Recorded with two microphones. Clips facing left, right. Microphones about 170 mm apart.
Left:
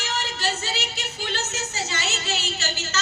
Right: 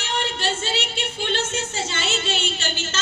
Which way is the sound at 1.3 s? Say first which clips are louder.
Right 5 dB; 30° right (ahead or behind).